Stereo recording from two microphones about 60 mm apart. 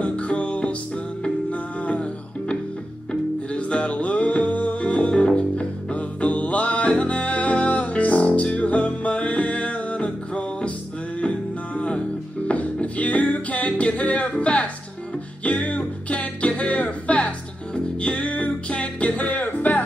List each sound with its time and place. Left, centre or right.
0.0 s music: centre